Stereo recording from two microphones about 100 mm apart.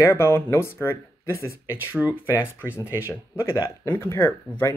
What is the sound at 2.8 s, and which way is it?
Speech, 30° left (ahead or behind).